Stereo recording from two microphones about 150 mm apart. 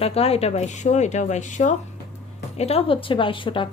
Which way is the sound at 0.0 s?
40° left (ahead or behind).